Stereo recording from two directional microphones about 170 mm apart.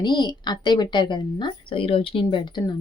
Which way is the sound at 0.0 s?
25° left (ahead or behind).